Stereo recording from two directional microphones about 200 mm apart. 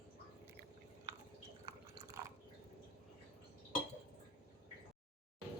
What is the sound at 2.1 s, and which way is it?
Drip, 15° right (ahead or behind).